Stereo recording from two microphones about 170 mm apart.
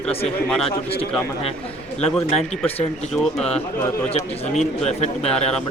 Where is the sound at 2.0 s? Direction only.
40° left (ahead or behind).